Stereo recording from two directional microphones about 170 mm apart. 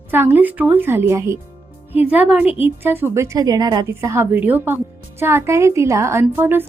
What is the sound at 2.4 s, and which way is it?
Speech, 35° left (ahead or behind).